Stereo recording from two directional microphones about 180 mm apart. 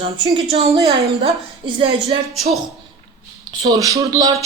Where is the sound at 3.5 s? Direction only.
20° right (ahead or behind).